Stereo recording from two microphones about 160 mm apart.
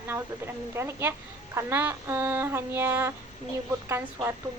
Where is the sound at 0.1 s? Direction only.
15° right (ahead or behind).